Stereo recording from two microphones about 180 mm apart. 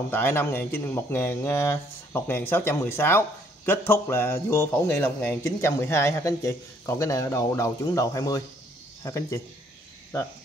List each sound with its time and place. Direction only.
0.1 s speech: 10° left (ahead or behind)